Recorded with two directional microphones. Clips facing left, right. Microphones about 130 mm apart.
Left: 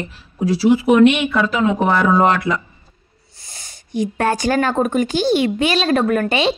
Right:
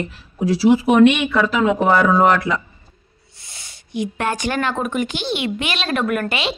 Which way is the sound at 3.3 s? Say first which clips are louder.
Left 2 dB; 40° left (ahead or behind).